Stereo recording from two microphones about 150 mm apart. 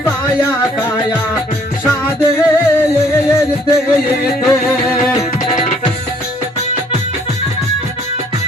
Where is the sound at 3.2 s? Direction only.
20° left (ahead or behind).